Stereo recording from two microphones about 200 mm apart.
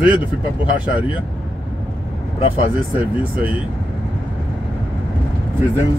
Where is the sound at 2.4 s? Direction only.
25° left (ahead or behind).